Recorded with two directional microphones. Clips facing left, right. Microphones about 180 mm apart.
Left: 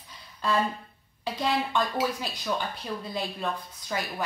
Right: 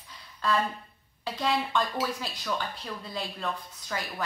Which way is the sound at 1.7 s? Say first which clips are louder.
Left 2 dB; 15° left (ahead or behind).